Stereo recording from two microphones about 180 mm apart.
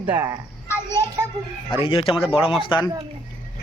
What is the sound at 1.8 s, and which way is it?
Speech, 30° left (ahead or behind).